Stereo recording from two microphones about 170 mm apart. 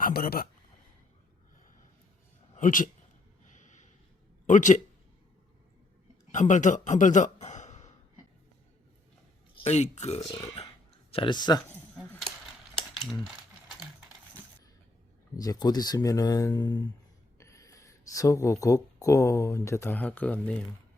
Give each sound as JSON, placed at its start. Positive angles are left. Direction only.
{"t": 0.0, "sound": "speech", "side_deg": 60}
{"t": 2.6, "sound": "speech", "side_deg": 50}
{"t": 4.4, "sound": "speech", "side_deg": 45}
{"t": 6.3, "sound": "a man's voice", "side_deg": 45}
{"t": 9.6, "sound": "speech", "side_deg": 40}
{"t": 11.9, "sound": "speech", "side_deg": 5}
{"t": 12.7, "sound": "mechanisms", "side_deg": 0}
{"t": 15.4, "sound": "speech", "side_deg": 20}